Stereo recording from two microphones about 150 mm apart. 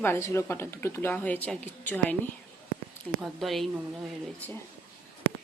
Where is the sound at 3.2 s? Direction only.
Centre (ahead or behind).